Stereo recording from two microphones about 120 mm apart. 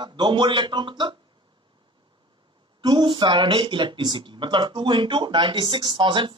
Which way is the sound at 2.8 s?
40° right (ahead or behind).